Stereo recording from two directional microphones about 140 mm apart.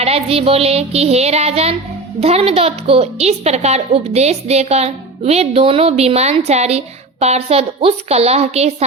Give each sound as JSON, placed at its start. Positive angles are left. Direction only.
{"t": 0.0, "sound": "a woman's voice", "side_deg": -45}